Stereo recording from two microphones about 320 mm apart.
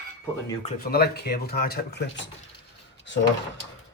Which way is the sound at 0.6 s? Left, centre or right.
Left.